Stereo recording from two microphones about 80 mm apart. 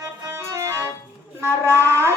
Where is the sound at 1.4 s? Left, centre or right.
Right.